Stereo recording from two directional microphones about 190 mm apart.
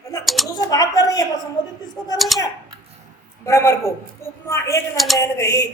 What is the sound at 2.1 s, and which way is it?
Speech, centre (ahead or behind).